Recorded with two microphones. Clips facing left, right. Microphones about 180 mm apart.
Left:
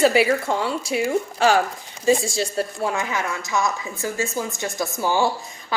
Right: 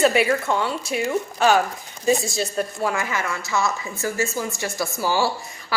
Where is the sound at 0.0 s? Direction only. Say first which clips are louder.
Left 1 dB; 30° left (ahead or behind).